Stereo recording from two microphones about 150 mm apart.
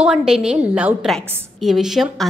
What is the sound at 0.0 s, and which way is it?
A woman's voice, 5° right (ahead or behind).